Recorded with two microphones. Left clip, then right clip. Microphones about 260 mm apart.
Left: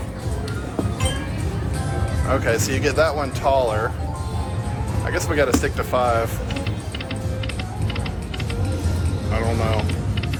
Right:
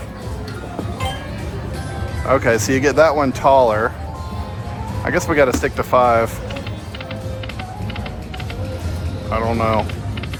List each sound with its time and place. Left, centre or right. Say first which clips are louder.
2.2 s speech: right 6 dB; right
5.0 s speech: right 6 dB; right
9.3 s speech: right 6 dB; right